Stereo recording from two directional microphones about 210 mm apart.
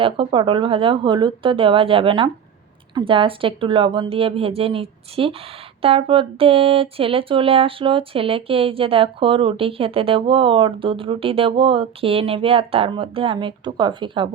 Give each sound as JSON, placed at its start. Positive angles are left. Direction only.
{"t": 0.0, "sound": "speech", "side_deg": -25}